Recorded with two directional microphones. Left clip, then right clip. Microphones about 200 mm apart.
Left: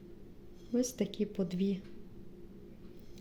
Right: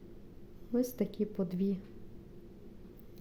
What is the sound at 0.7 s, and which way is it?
Speech, 5° right (ahead or behind).